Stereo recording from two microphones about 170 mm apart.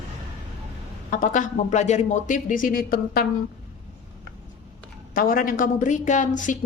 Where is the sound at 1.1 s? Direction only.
50° left (ahead or behind).